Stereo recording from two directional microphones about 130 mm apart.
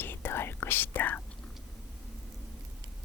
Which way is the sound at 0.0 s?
15° left (ahead or behind).